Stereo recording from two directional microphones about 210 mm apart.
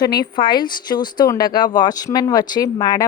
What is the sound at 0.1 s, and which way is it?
A woman's voice, 20° left (ahead or behind).